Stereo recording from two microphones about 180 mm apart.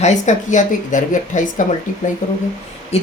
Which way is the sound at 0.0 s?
40° left (ahead or behind).